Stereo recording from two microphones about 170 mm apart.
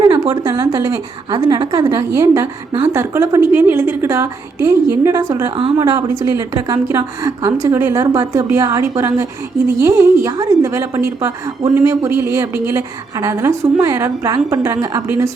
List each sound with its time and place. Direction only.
0.0 s a woman's voice: 25° right (ahead or behind)
5.5 s a woman's voice: 30° right (ahead or behind)